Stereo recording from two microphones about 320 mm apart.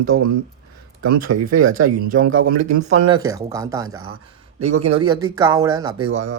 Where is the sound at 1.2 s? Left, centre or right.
Right.